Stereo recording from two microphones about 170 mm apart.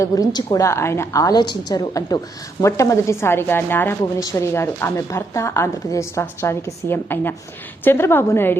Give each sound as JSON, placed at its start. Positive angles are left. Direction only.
{"t": 0.0, "sound": "a woman's voice", "side_deg": 20}